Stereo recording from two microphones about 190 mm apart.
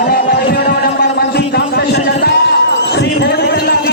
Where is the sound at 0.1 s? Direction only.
55° left (ahead or behind).